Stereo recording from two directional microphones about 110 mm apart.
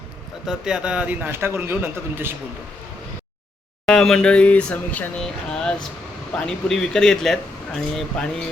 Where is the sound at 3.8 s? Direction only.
5° left (ahead or behind).